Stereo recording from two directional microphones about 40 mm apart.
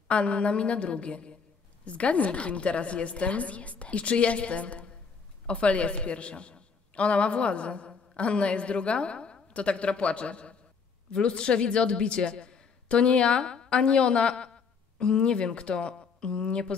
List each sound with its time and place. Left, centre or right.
0.1 s a woman's voice: left